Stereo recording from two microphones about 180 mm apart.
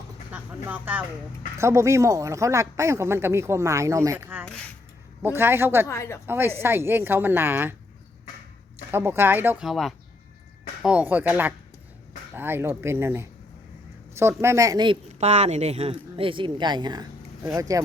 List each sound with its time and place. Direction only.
0.3 s speech: 10° right (ahead or behind)
5.9 s a woman's voice: 15° left (ahead or behind)
6.2 s speech: 10° right (ahead or behind)
8.9 s speech: 10° right (ahead or behind)
15.2 s speech: 35° right (ahead or behind); by 17.8 s 20° right (ahead or behind)